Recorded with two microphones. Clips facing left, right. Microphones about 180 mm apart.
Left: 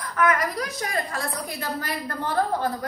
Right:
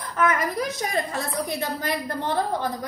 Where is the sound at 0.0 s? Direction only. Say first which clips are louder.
Even; 25° right (ahead or behind).